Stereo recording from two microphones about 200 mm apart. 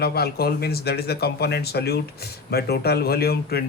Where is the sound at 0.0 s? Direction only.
50° left (ahead or behind).